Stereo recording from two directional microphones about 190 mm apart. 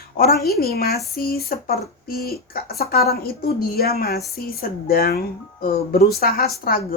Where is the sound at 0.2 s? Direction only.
50° left (ahead or behind).